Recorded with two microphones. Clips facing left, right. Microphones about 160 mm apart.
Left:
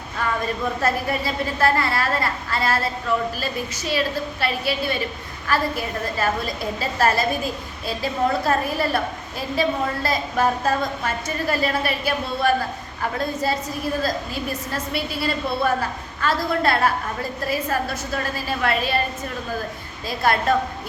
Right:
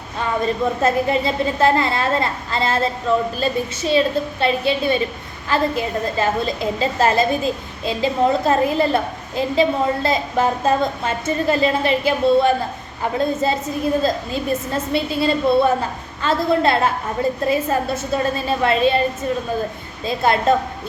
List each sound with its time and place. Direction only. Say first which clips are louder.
0.2 s a woman's voice: right 4 dB; 25° right (ahead or behind)
20.1 s a woman's voice: right 3 dB; 25° right (ahead or behind)